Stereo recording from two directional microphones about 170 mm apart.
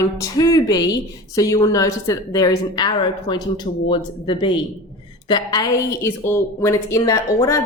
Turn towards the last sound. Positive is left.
turn(degrees=20)  # may be behind; listen again after turning